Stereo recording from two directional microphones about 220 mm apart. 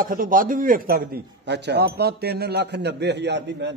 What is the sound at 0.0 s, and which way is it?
A man's voice, 40° right (ahead or behind).